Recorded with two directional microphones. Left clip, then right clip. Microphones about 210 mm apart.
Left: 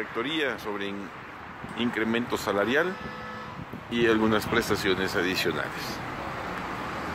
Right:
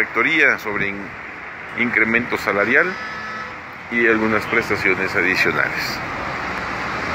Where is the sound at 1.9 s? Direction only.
15° left (ahead or behind).